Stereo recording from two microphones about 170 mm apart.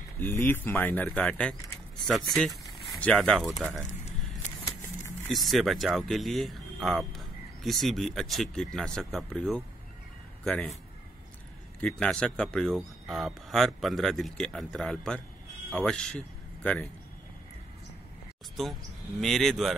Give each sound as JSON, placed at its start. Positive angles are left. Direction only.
{"t": 0.2, "sound": "speech", "side_deg": 10}
{"t": 2.9, "sound": "speech", "side_deg": 5}
{"t": 4.4, "sound": "vehicle", "side_deg": 45}
{"t": 5.3, "sound": "speech", "side_deg": 0}
{"t": 11.8, "sound": "speech", "side_deg": 5}
{"t": 18.6, "sound": "speech", "side_deg": 0}